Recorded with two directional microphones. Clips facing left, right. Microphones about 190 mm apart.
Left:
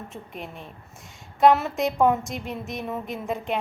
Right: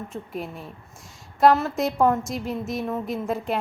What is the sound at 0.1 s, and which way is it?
A woman's voice, 5° right (ahead or behind).